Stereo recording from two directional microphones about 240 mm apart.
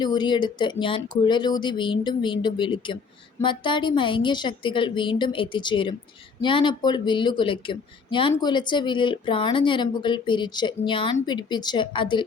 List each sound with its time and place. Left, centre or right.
0.0 s speech: centre